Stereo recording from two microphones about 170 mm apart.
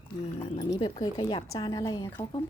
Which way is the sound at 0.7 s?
30° left (ahead or behind).